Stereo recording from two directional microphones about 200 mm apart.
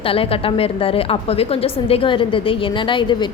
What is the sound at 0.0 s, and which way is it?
A woman's voice, 30° left (ahead or behind).